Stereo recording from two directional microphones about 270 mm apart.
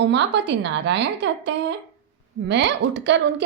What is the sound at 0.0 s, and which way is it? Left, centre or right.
A woman's voice, right.